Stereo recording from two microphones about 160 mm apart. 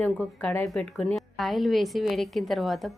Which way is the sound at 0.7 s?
Centre (ahead or behind).